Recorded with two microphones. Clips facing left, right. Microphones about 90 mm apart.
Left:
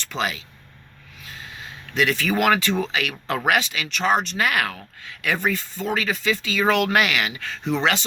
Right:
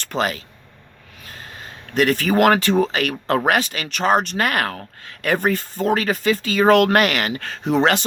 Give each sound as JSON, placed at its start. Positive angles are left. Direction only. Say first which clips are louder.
{"t": 0.0, "sound": "speech", "louder": "right 4 dB", "side_deg": -45}